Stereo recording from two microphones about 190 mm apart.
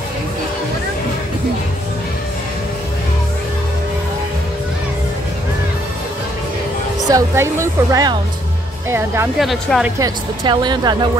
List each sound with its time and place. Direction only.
7.1 s a woman's voice: 15° right (ahead or behind)
9.4 s speech: centre (ahead or behind)
9.9 s speech: 20° right (ahead or behind)